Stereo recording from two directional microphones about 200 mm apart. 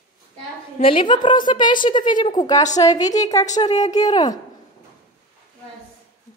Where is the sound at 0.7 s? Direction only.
25° left (ahead or behind).